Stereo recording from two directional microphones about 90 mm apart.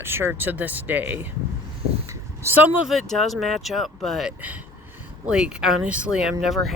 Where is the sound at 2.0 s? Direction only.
30° right (ahead or behind).